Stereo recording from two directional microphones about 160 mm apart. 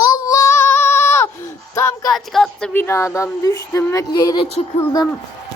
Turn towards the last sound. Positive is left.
turn(degrees=25)  # may be behind; listen again after turning